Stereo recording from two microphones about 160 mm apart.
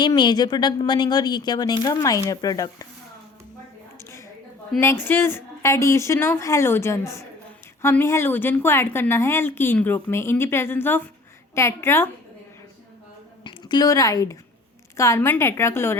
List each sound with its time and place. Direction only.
0.0 s a woman's voice: 30° left (ahead or behind)
4.8 s a woman's voice: 15° left (ahead or behind)
13.4 s a woman's voice: 25° left (ahead or behind)